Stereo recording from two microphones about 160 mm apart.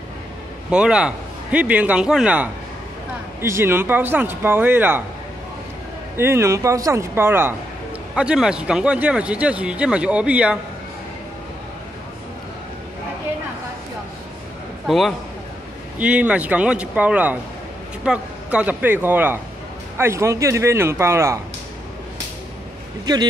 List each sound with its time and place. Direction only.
0.7 s speech: 5° right (ahead or behind)
6.1 s speech: 15° right (ahead or behind)
14.9 s a man's voice: centre (ahead or behind); by 21.4 s 15° right (ahead or behind)